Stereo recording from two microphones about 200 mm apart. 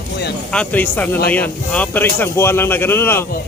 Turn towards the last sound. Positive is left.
turn(degrees=10)  # may be behind; listen again after turning